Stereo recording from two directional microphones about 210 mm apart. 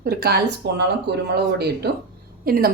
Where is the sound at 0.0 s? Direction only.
50° right (ahead or behind).